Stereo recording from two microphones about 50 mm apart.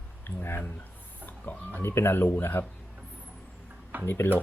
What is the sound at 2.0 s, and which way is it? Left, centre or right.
Speech, left.